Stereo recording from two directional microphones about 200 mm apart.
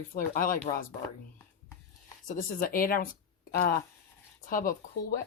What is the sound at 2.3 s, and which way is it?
Speech, 45° left (ahead or behind).